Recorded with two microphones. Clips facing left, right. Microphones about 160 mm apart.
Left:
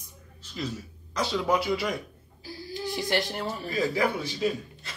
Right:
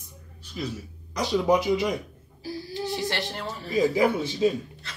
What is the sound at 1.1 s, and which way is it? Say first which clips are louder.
Speech: right 4 dB; 15° right (ahead or behind).